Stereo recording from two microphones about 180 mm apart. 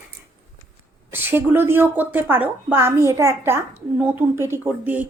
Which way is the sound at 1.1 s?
10° right (ahead or behind).